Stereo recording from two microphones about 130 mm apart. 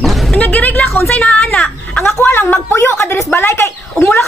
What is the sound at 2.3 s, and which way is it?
Speech, 15° left (ahead or behind).